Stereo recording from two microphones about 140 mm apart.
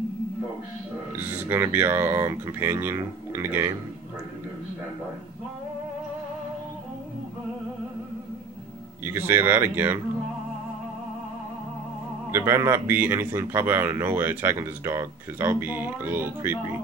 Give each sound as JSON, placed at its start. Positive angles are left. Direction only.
{"t": 1.1, "sound": "a man's voice", "side_deg": -15}
{"t": 9.0, "sound": "a man's voice", "side_deg": -15}
{"t": 12.3, "sound": "a man's voice", "side_deg": -20}